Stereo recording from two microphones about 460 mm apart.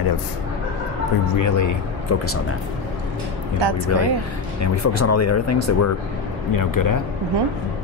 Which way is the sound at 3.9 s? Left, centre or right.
Left.